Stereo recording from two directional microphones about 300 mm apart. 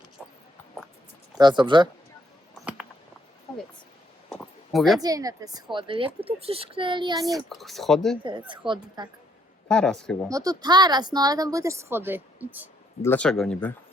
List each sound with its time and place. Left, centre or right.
0.2 s music: centre
1.4 s speech: centre
2.6 s a sound: centre
4.3 s a sound: centre
4.9 s speech: centre
7.3 s speech: centre
8.2 s speech: centre
9.6 s speech: centre
10.2 s speech: centre
13.0 s speech: centre